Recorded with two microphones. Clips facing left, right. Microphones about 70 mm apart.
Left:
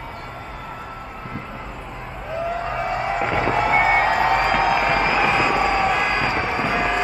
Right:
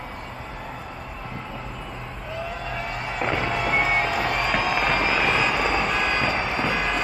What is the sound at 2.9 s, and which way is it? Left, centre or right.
Music, left.